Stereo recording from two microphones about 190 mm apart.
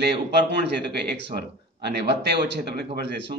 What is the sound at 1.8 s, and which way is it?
Speech, 60° right (ahead or behind).